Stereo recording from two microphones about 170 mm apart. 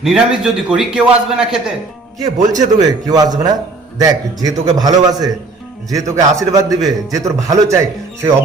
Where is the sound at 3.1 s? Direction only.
20° right (ahead or behind).